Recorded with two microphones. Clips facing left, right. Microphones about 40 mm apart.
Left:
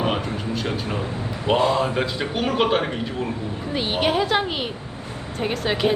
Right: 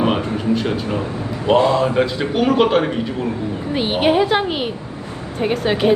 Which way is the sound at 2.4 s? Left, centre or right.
Right.